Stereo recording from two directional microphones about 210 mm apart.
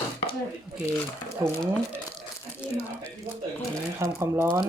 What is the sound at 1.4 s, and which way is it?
Speech, 15° right (ahead or behind).